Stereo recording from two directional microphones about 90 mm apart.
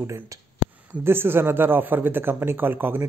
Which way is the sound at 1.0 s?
25° right (ahead or behind).